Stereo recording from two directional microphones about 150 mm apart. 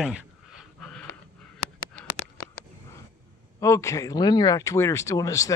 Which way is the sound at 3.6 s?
20° left (ahead or behind).